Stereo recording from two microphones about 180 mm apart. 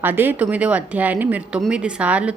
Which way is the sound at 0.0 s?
10° right (ahead or behind).